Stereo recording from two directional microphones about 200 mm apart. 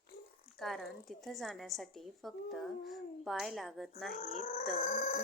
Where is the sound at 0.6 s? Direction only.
Centre (ahead or behind).